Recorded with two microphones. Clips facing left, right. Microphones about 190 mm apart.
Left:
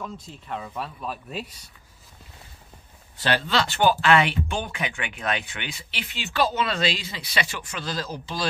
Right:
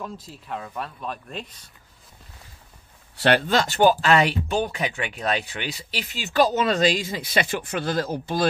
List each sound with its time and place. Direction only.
0.0 s speech: 5° right (ahead or behind)
3.2 s speech: 60° right (ahead or behind)